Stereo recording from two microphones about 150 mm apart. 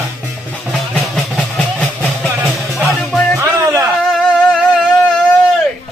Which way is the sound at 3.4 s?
20° right (ahead or behind).